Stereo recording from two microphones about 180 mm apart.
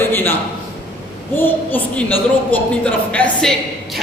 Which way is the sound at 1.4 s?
10° left (ahead or behind).